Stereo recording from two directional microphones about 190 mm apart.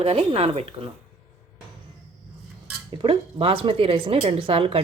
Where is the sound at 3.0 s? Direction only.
30° right (ahead or behind).